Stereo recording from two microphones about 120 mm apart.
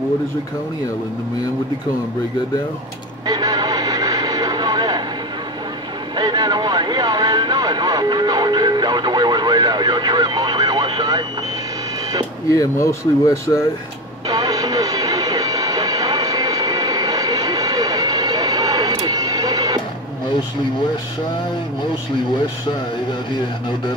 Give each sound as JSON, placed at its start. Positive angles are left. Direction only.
{"t": 3.3, "sound": "vehicle", "side_deg": -35}
{"t": 6.1, "sound": "vehicle", "side_deg": -35}
{"t": 12.4, "sound": "speech", "side_deg": 25}
{"t": 14.2, "sound": "music", "side_deg": -30}